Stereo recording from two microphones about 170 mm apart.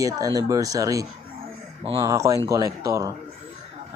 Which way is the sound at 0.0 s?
20° right (ahead or behind).